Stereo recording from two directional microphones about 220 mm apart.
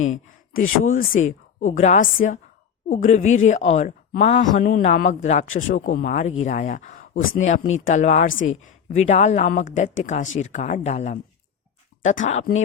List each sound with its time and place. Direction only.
0.1 s a sound: 35° left (ahead or behind)
1.2 s speech: 35° left (ahead or behind)
8.3 s speech: 60° left (ahead or behind)
8.6 s speech: 35° left (ahead or behind)